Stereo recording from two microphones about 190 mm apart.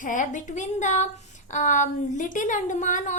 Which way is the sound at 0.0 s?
40° left (ahead or behind).